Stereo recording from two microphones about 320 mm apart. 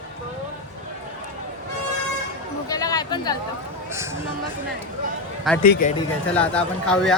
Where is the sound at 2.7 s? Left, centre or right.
Centre.